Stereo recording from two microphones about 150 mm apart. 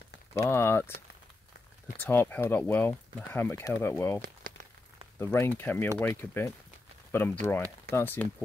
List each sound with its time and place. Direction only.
0.3 s speech: 20° left (ahead or behind)
2.0 s speech: 15° left (ahead or behind)
4.2 s crumpling: 70° right (ahead or behind)
5.2 s speech: 15° left (ahead or behind)